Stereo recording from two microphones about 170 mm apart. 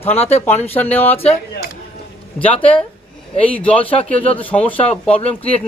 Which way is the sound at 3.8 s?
35° left (ahead or behind).